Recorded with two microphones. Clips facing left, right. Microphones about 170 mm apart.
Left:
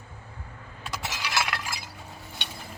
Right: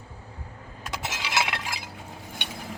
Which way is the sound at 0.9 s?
20° right (ahead or behind).